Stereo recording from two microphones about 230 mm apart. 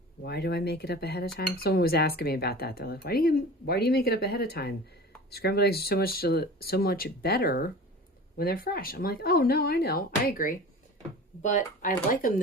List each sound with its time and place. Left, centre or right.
0.3 s speech: left